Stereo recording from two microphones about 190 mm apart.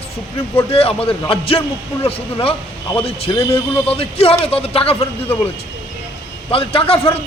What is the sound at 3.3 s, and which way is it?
A man's voice, 25° left (ahead or behind).